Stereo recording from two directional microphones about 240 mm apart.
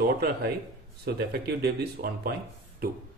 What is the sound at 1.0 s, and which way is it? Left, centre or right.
Speech, right.